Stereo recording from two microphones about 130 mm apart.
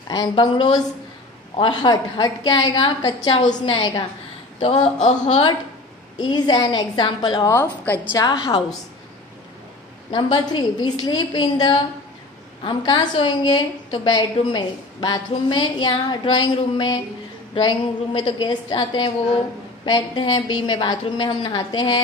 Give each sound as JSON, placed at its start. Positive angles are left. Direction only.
{"t": 0.1, "sound": "a woman's voice", "side_deg": 30}
{"t": 4.6, "sound": "speech", "side_deg": 50}
{"t": 6.1, "sound": "a woman's voice", "side_deg": 35}
{"t": 7.4, "sound": "a woman's voice", "side_deg": 15}
{"t": 8.2, "sound": "a woman's voice", "side_deg": 35}
{"t": 10.1, "sound": "a woman's voice", "side_deg": 35}